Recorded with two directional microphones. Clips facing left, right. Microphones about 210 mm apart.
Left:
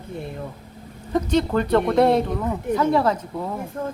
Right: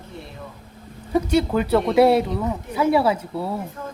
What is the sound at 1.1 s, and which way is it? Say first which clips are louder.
Speech: right 1 dB; 10° right (ahead or behind).